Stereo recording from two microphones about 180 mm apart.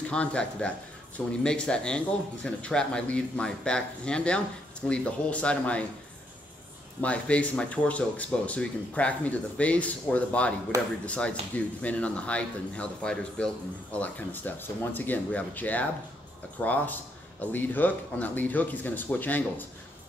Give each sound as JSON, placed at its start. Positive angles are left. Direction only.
{"t": 0.1, "sound": "speech", "side_deg": 5}
{"t": 7.0, "sound": "speech", "side_deg": 5}